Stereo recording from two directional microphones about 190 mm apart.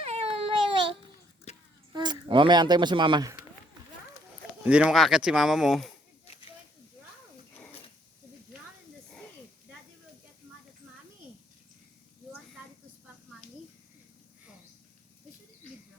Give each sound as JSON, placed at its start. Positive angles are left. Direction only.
{"t": 0.0, "sound": "baby cry", "side_deg": -30}
{"t": 1.9, "sound": "speech", "side_deg": -20}
{"t": 4.6, "sound": "speech", "side_deg": -5}